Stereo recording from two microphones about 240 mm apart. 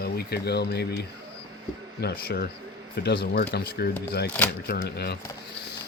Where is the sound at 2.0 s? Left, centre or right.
Left.